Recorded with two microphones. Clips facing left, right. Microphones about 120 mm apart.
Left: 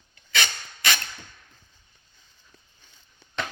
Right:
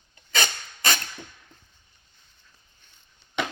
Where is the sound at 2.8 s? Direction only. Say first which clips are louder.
Left 2 dB; 90° left.